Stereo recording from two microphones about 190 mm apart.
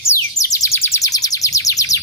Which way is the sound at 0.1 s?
15° left (ahead or behind).